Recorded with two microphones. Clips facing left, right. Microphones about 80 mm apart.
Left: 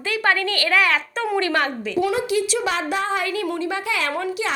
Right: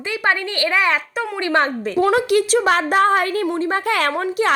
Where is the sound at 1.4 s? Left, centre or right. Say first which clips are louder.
Right 5 dB; right.